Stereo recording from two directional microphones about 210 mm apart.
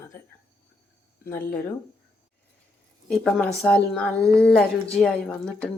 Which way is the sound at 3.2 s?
Centre (ahead or behind).